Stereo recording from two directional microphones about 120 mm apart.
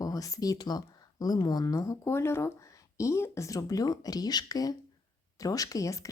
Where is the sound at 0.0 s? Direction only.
30° left (ahead or behind).